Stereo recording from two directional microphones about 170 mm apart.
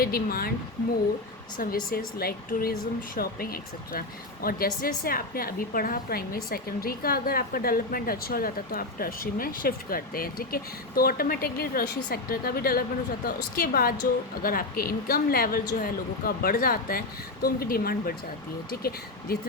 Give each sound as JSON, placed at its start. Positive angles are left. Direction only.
{"t": 0.0, "sound": "speech", "side_deg": 60}
{"t": 1.5, "sound": "speech", "side_deg": 55}